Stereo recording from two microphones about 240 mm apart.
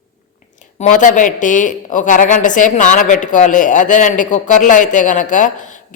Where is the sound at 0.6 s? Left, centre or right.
Left.